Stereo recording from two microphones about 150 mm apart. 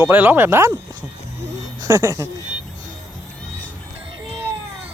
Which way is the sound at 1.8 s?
20° right (ahead or behind).